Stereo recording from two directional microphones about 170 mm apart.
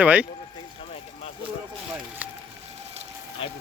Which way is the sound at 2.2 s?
10° right (ahead or behind).